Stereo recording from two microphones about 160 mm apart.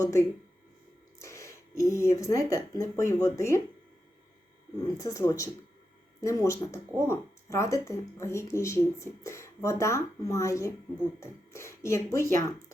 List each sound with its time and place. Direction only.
0.0 s speech: 20° left (ahead or behind)
4.8 s speech: 20° left (ahead or behind)